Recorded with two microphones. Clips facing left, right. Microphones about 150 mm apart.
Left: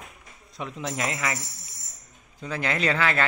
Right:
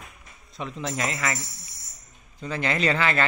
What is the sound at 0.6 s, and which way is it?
A man's voice, 5° left (ahead or behind).